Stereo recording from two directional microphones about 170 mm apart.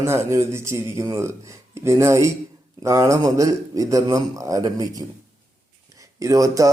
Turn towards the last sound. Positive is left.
turn(degrees=-20)  # may be behind; listen again after turning